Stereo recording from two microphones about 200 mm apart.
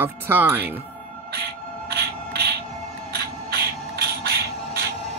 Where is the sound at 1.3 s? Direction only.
55° right (ahead or behind).